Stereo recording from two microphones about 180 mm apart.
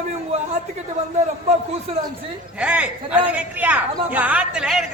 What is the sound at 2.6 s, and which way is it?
A woman's voice, 5° right (ahead or behind).